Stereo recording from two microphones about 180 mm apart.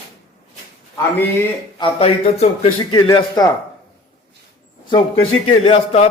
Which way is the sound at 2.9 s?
25° left (ahead or behind).